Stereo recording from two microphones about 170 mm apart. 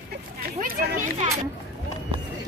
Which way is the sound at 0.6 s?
55° right (ahead or behind).